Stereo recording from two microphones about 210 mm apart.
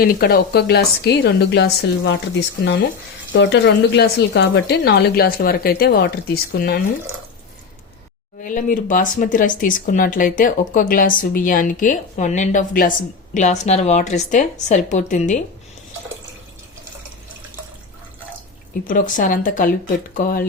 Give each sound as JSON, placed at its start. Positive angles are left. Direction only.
{"t": 0.0, "sound": "a woman's voice", "side_deg": 45}
{"t": 3.3, "sound": "a woman's voice", "side_deg": 55}
{"t": 8.4, "sound": "speech", "side_deg": 40}
{"t": 18.9, "sound": "a woman's voice", "side_deg": 40}